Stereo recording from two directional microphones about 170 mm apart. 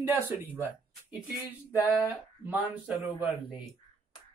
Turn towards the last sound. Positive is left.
turn(degrees=-10)  # may be behind; listen again after turning